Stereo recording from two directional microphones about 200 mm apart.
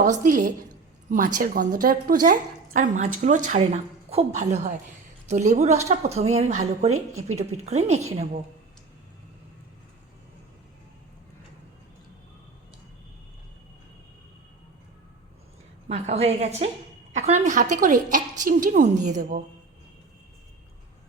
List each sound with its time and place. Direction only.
0.0 s a woman's voice: 40° right (ahead or behind)
15.9 s a woman's voice: 30° right (ahead or behind)